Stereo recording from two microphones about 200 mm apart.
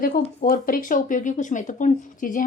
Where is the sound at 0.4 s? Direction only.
45° left (ahead or behind).